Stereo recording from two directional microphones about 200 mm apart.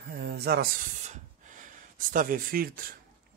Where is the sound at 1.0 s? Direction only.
40° right (ahead or behind).